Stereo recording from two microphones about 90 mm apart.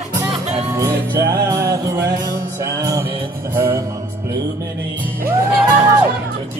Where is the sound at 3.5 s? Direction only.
25° right (ahead or behind).